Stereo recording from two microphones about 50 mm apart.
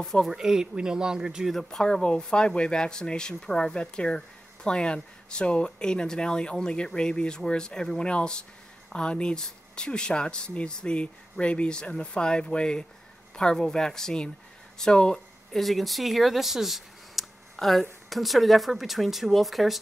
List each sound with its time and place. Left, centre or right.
0.0 s speech: centre
0.3 s speech: centre
1.5 s speech: centre
15.5 s speech: centre